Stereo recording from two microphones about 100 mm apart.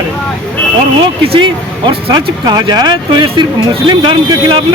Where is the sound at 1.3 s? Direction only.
60° right (ahead or behind).